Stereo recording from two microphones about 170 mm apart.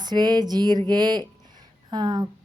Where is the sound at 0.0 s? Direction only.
25° right (ahead or behind).